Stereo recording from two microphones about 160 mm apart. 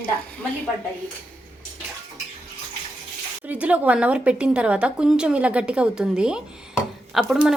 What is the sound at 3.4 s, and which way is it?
A woman's voice, 10° right (ahead or behind).